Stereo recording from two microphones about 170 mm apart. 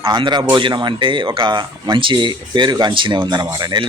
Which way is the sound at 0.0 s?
25° right (ahead or behind).